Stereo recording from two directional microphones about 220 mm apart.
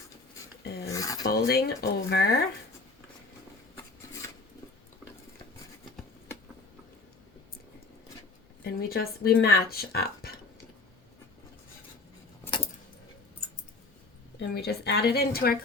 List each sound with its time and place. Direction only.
0.6 s dog: 45° left (ahead or behind)
0.9 s filing: 15° left (ahead or behind)
1.3 s speech: 45° left (ahead or behind)
8.6 s speech: 45° left (ahead or behind)
14.3 s speech: 50° left (ahead or behind)